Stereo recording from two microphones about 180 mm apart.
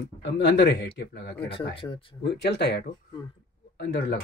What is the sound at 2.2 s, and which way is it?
Speech, 70° left (ahead or behind).